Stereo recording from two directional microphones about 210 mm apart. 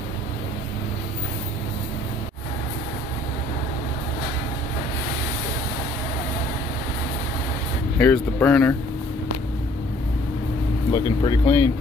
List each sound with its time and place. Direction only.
8.0 s speech: 10° left (ahead or behind)
10.9 s speech: 20° left (ahead or behind)